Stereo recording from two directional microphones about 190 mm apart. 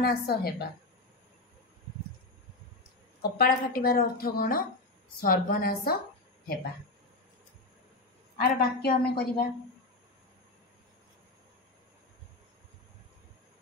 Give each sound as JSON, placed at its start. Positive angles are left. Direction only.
{"t": 0.0, "sound": "a woman's voice", "side_deg": 55}
{"t": 3.2, "sound": "a woman's voice", "side_deg": 50}
{"t": 8.5, "sound": "a woman's voice", "side_deg": 55}